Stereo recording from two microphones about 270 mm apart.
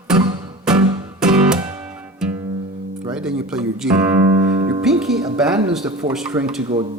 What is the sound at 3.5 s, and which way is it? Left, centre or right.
Speech, centre.